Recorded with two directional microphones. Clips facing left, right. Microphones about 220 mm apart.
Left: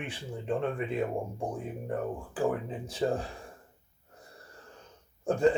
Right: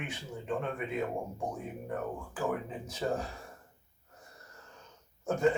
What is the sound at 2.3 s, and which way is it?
Speech, 30° left (ahead or behind).